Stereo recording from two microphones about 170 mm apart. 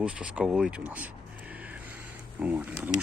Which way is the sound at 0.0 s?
5° right (ahead or behind).